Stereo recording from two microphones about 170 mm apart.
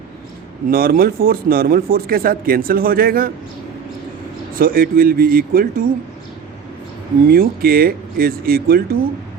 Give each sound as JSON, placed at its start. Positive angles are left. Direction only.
{"t": 0.7, "sound": "speech", "side_deg": -60}
{"t": 4.5, "sound": "speech", "side_deg": -55}
{"t": 7.3, "sound": "speech", "side_deg": -60}